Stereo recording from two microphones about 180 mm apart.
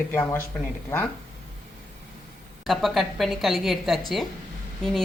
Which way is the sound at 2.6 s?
Centre (ahead or behind).